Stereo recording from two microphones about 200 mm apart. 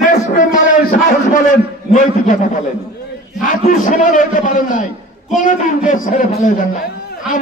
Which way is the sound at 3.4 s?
40° left (ahead or behind).